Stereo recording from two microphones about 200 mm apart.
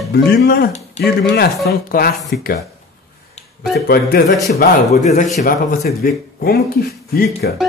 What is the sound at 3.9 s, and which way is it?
Speech, 50° left (ahead or behind).